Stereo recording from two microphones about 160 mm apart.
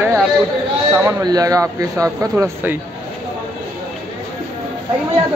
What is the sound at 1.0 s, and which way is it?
Speech, 20° right (ahead or behind).